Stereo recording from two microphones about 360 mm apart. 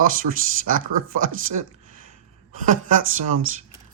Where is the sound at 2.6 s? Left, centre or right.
Right.